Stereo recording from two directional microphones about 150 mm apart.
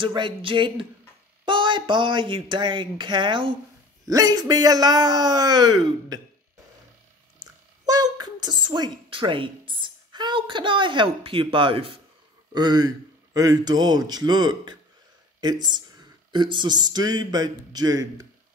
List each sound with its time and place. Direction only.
0.0 s a man's voice: 30° right (ahead or behind)
7.3 s a man's voice: 25° right (ahead or behind)
16.3 s a man's voice: 30° right (ahead or behind)